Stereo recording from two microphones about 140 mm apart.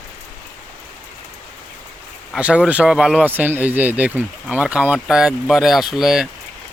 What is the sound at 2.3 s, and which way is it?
Speech, 10° right (ahead or behind).